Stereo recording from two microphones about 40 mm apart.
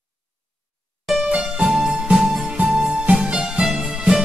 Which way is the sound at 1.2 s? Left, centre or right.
Right.